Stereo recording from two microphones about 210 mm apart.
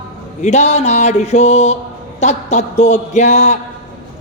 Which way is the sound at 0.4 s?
30° left (ahead or behind).